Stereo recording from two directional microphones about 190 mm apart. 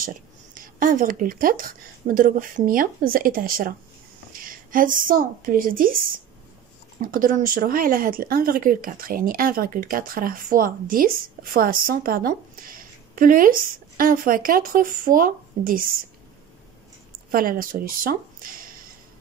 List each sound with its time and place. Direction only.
0.6 s a woman's voice: 45° right (ahead or behind)
17.3 s speech: 50° right (ahead or behind)